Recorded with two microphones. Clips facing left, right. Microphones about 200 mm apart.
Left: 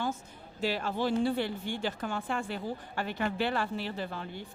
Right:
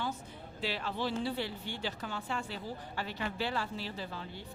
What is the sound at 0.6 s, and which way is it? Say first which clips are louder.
Speech: left 5 dB; 45° left (ahead or behind).